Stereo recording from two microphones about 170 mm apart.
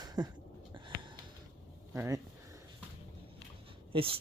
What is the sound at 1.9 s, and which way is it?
Speech, 15° right (ahead or behind).